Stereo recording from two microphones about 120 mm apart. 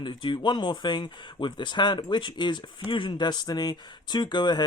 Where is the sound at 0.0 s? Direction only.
40° left (ahead or behind).